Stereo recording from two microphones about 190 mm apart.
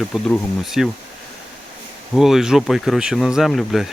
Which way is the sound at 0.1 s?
Centre (ahead or behind).